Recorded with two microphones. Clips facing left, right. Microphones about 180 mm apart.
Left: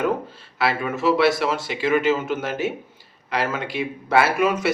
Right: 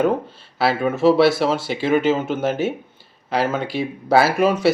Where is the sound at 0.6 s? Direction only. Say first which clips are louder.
Right 5 dB; 30° right (ahead or behind).